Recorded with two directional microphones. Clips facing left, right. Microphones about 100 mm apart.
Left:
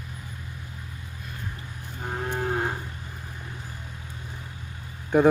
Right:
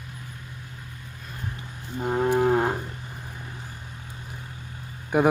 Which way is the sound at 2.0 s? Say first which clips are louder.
Right 8 dB; 90° right.